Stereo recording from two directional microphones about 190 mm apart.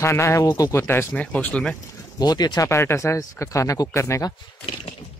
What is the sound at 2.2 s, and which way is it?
Speech, 20° left (ahead or behind).